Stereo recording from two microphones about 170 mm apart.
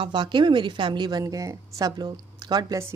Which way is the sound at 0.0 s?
25° right (ahead or behind).